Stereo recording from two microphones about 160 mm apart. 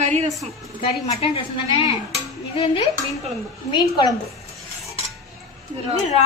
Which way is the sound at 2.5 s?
35° left (ahead or behind).